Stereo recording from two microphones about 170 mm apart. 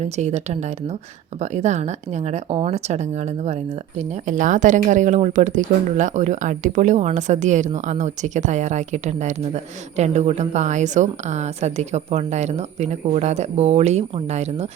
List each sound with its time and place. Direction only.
0.0 s a woman's voice: 40° right (ahead or behind)